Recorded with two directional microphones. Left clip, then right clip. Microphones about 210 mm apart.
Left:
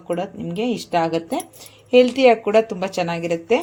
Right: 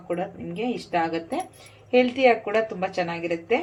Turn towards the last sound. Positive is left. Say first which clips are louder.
# left 5 dB
turn(degrees=50)  # may be behind; listen again after turning